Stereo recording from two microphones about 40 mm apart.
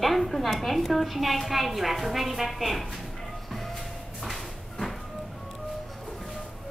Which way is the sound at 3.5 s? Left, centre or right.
Centre.